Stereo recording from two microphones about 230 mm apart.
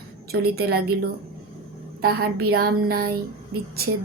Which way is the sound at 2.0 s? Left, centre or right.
Right.